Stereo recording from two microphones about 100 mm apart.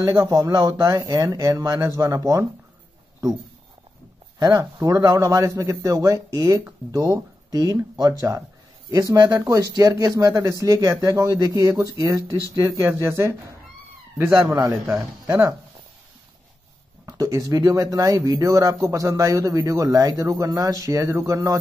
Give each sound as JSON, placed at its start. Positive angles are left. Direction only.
{"t": 0.0, "sound": "speech", "side_deg": -35}
{"t": 4.4, "sound": "speech", "side_deg": -35}
{"t": 17.0, "sound": "speech", "side_deg": -35}